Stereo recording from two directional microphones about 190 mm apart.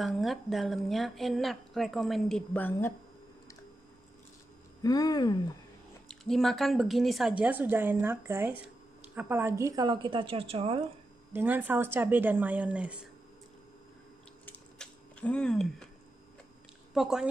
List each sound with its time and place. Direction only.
0.0 s a woman's voice: centre (ahead or behind)
4.8 s speech: 20° left (ahead or behind)
6.0 s a woman's voice: centre (ahead or behind); by 10.8 s 30° right (ahead or behind)
11.3 s a woman's voice: 10° right (ahead or behind)
14.4 s a sound: 5° left (ahead or behind)
16.9 s a woman's voice: centre (ahead or behind)